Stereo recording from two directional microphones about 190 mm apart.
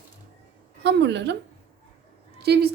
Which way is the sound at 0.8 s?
65° right (ahead or behind).